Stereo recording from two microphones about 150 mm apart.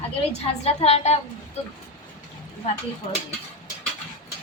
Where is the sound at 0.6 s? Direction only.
45° left (ahead or behind).